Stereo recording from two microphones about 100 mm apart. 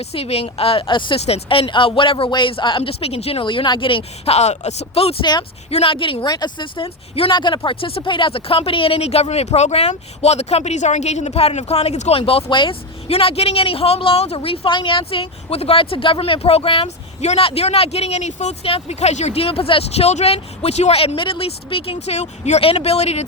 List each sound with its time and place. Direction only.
0.0 s speech: 85° left; by 1.2 s 55° left (ahead or behind)
1.2 s speech: 75° left (ahead or behind)
3.4 s speech: 55° left (ahead or behind); by 5.1 s 85° left
5.2 s speech: 45° left (ahead or behind)
5.7 s speech: 65° left (ahead or behind)
12.5 s speech: 55° left (ahead or behind)
13.1 s speech: 85° left